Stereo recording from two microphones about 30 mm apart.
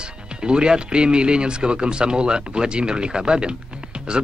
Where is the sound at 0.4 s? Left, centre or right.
Right.